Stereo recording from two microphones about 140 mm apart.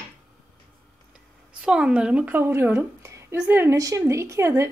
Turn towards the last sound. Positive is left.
turn(degrees=-20)  # may be behind; listen again after turning